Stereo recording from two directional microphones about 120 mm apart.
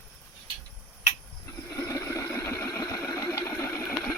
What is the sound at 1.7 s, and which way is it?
Vehicle, 25° left (ahead or behind).